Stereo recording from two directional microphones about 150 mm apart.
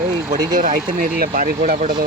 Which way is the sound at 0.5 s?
65° right (ahead or behind).